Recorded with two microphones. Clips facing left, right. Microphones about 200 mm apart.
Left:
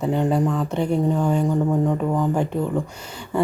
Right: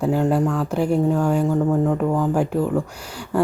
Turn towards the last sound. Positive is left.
turn(degrees=-5)  # may be behind; listen again after turning